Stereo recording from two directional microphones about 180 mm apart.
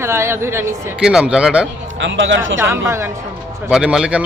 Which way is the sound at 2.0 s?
90° right.